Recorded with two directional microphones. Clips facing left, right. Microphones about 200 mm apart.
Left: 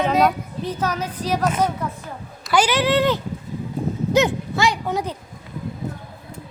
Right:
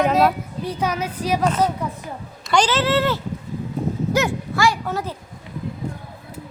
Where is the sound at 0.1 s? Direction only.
5° right (ahead or behind).